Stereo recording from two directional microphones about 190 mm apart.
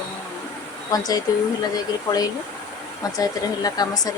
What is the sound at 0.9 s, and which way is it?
A woman's voice, 20° left (ahead or behind).